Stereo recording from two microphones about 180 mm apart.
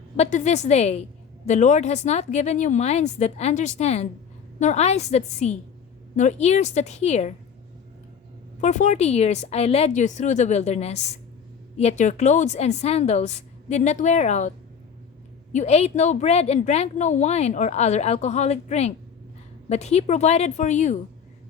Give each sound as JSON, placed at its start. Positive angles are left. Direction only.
{"t": 0.2, "sound": "a woman's voice", "side_deg": 40}
{"t": 8.6, "sound": "a woman's voice", "side_deg": 40}
{"t": 15.5, "sound": "a woman's voice", "side_deg": 35}